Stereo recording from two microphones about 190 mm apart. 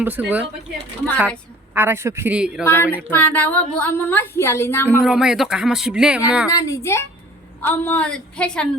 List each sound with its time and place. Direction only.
0.0 s a man's voice: 10° right (ahead or behind)
1.7 s a man's voice: 10° right (ahead or behind)
2.6 s a woman's voice: 10° left (ahead or behind)
4.9 s speech: 5° right (ahead or behind)
6.5 s a woman's voice: 20° left (ahead or behind)